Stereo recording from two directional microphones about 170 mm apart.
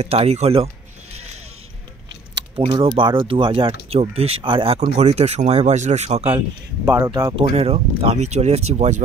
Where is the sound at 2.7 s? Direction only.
30° right (ahead or behind).